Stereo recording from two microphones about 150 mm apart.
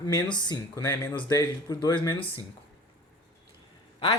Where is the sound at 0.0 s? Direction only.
25° left (ahead or behind).